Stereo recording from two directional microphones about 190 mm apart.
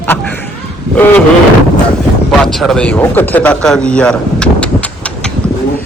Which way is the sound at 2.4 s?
Centre (ahead or behind).